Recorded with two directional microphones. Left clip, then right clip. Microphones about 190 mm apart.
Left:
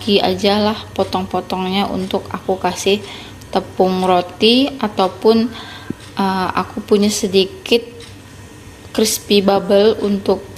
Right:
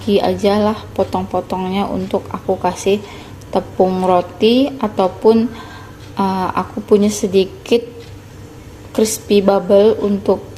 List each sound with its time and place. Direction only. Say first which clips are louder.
0.0 s a woman's voice: even; 10° right (ahead or behind)
8.9 s a woman's voice: even; 10° right (ahead or behind)